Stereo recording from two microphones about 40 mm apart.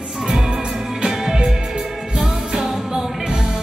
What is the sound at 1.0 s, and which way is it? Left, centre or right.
Music, centre.